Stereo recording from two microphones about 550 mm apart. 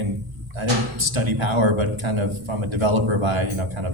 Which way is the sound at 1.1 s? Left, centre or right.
Right.